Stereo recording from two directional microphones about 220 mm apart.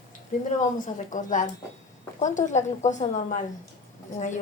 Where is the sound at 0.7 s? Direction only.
35° left (ahead or behind).